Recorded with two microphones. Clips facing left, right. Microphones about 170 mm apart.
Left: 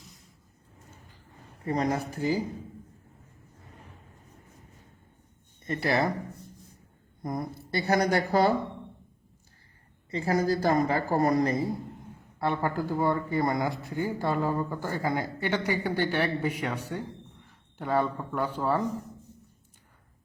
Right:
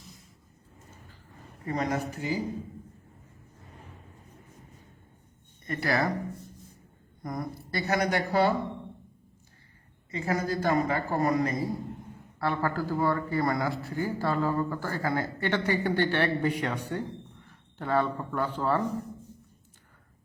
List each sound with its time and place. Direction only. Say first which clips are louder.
1.6 s speech: left 2 dB; 30° left (ahead or behind)
5.6 s speech: left 1 dB; 25° left (ahead or behind)
7.2 s speech: left 2 dB; 25° left (ahead or behind)
10.1 s speech: left 4 dB; 30° left (ahead or behind)
12.4 s speech: left 1 dB; 20° left (ahead or behind)